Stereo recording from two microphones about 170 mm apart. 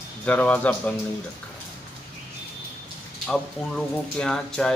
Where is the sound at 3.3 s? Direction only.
5° left (ahead or behind).